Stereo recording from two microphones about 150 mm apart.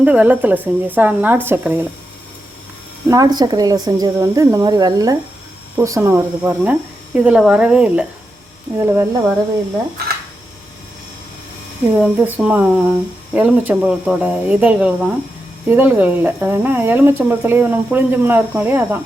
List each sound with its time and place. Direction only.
0.0 s speech: 10° right (ahead or behind)
3.1 s a woman's voice: 25° right (ahead or behind)
6.7 s speech: 10° right (ahead or behind)
11.9 s speech: 5° right (ahead or behind)